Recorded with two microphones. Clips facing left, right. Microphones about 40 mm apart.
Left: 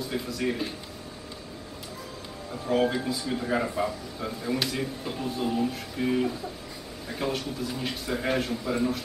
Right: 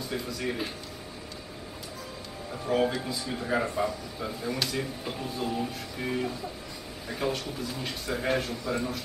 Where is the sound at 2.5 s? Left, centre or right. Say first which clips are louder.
Left 2 dB; centre.